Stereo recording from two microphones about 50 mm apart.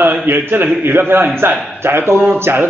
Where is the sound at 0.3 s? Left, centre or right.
Right.